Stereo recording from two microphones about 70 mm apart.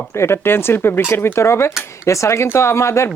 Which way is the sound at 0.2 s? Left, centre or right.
Left.